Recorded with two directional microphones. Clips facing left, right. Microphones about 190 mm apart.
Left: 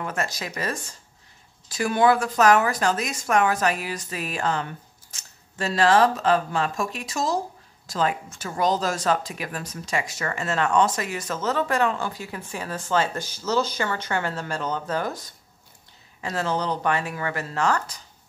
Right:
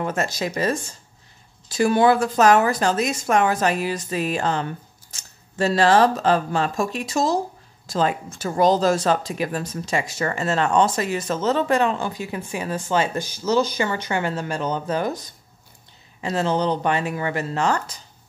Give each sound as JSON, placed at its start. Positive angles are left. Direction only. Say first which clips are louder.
{"t": 0.0, "sound": "speech", "louder": "right 5 dB", "side_deg": -25}